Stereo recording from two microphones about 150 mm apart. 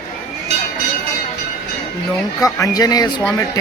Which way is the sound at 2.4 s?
25° left (ahead or behind).